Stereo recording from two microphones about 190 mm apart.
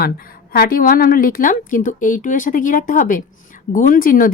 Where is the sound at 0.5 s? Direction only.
50° left (ahead or behind).